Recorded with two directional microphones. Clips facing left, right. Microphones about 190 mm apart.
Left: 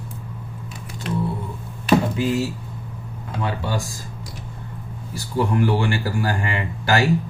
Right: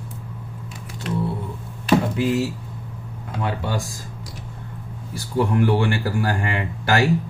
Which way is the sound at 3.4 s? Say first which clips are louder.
Even; 50° right (ahead or behind).